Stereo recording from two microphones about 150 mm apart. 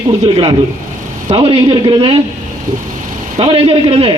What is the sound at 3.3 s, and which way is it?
Speech, 40° right (ahead or behind).